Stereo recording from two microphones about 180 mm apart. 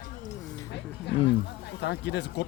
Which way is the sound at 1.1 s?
75° left (ahead or behind).